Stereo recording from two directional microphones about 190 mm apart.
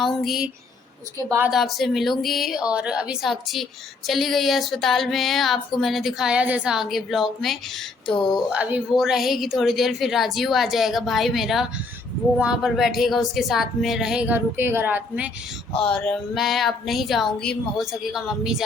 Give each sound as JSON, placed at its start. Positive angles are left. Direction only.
{"t": 0.0, "sound": "a woman's voice", "side_deg": 0}
{"t": 15.8, "sound": "a woman's voice", "side_deg": 5}